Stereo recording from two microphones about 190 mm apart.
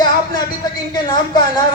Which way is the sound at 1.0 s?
20° left (ahead or behind).